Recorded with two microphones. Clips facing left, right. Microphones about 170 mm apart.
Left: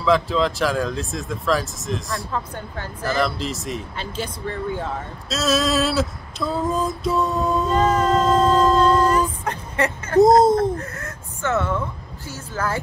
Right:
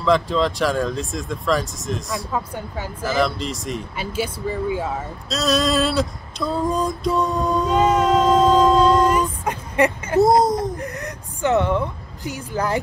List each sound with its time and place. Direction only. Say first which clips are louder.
0.0 s speech: even; centre (ahead or behind)
5.3 s female singing: right 1 dB; centre (ahead or behind)
8.7 s a sound: right 1 dB; 10° right (ahead or behind)
12.3 s a woman's voice: right 3 dB; 15° right (ahead or behind)